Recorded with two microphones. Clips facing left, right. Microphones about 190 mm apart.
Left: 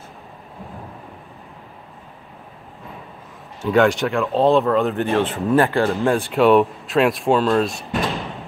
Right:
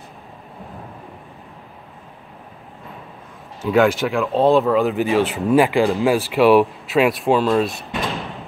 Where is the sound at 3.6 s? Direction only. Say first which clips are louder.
Even; centre (ahead or behind).